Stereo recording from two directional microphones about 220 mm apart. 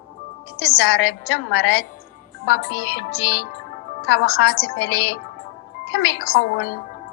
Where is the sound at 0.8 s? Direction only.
55° left (ahead or behind).